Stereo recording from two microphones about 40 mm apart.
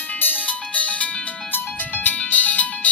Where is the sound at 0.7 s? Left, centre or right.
Left.